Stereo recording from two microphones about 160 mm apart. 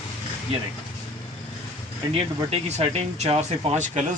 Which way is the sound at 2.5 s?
40° right (ahead or behind).